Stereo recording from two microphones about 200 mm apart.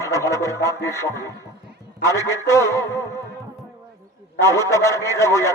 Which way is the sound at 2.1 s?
15° left (ahead or behind).